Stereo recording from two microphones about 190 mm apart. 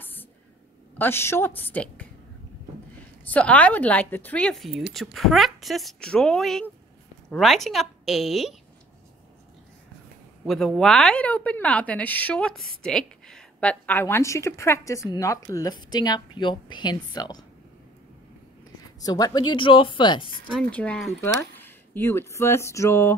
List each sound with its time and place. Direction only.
0.0 s a sound: 10° left (ahead or behind)
0.9 s a woman's voice: 10° left (ahead or behind)
3.3 s a woman's voice: 5° left (ahead or behind)
10.4 s a woman's voice: centre (ahead or behind); by 17.5 s 20° left (ahead or behind)
18.9 s speech: 20° left (ahead or behind)
20.5 s a woman's voice: 5° left (ahead or behind)